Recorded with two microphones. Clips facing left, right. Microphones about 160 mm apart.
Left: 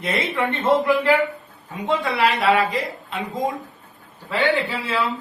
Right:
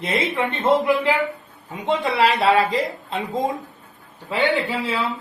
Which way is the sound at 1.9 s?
25° right (ahead or behind).